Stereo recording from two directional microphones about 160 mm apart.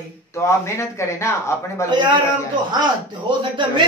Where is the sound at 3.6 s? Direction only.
30° right (ahead or behind).